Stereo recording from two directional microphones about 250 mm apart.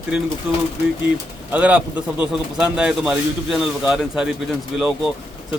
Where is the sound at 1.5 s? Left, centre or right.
Centre.